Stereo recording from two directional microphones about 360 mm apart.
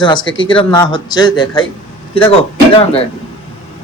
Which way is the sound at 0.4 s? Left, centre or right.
Centre.